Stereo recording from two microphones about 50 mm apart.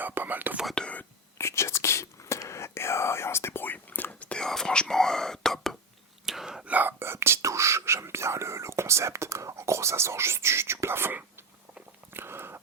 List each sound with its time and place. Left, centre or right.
0.0 s whispering: right
0.8 s whispering: centre
1.4 s whispering: left
4.4 s whispering: centre
6.2 s whispering: centre
6.7 s whispering: right
7.0 s whispering: right
12.1 s a sound: right